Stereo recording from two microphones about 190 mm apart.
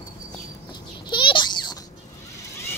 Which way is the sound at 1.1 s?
25° left (ahead or behind).